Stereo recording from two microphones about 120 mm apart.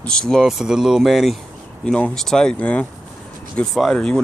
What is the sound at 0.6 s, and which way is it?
Speech, 5° right (ahead or behind).